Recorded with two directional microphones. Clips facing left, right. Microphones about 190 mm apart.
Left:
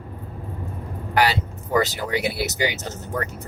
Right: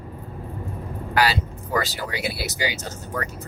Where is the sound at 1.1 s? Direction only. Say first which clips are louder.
Left 1 dB; 20° left (ahead or behind).